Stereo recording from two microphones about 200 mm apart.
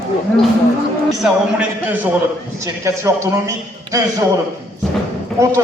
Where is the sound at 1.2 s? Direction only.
5° right (ahead or behind).